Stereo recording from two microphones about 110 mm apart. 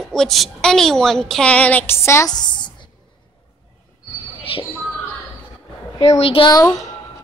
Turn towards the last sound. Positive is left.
turn(degrees=60)  # may be behind; listen again after turning